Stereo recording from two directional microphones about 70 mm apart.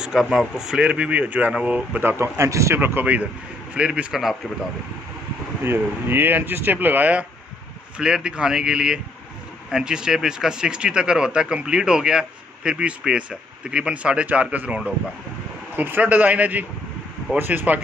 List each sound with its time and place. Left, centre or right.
0.0 s speech: centre
2.0 s a man's voice: right
2.8 s speech: right
3.7 s speech: centre
4.1 s speech: centre
5.6 s speech: right
8.0 s speech: centre; by 17.7 s right